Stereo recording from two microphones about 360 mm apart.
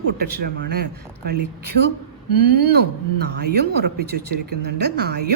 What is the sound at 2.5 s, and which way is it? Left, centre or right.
Speech, right.